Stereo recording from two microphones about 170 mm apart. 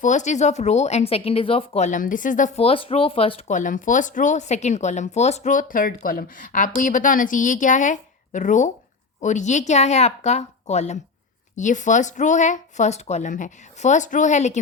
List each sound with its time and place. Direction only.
0.0 s speech: 45° left (ahead or behind)
2.6 s speech: 35° left (ahead or behind)